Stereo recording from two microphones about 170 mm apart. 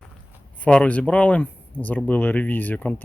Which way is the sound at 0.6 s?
10° left (ahead or behind).